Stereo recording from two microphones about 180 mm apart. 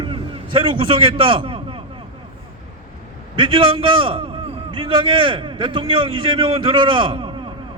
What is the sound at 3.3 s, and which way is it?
A man's voice, 25° right (ahead or behind).